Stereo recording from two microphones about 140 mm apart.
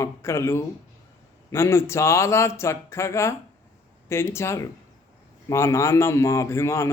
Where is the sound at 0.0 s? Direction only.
20° left (ahead or behind).